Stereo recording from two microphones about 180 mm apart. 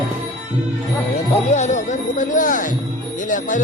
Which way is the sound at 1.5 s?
40° left (ahead or behind).